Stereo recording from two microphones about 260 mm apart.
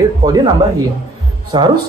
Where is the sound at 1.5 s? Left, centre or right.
Centre.